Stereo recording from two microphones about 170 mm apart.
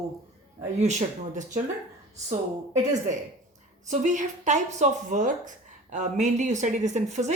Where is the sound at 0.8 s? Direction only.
45° right (ahead or behind).